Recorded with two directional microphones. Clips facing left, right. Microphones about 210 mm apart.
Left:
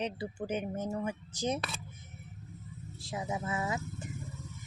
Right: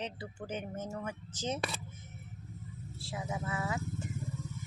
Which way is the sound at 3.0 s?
20° left (ahead or behind).